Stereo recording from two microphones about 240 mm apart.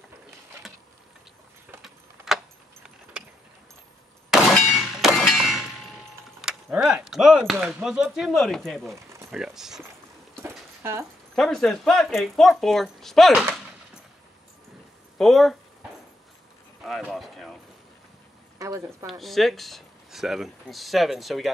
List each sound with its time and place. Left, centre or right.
1.7 s keys jangling: centre
4.3 s clang: centre
6.4 s speech: centre
10.4 s a sound: centre
11.3 s speech: centre
15.1 s speech: centre
16.8 s speech: centre
18.6 s a woman's voice: centre
19.0 s speech: centre